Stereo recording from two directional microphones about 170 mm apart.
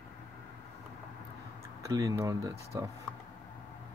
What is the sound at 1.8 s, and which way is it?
Speech, 20° right (ahead or behind).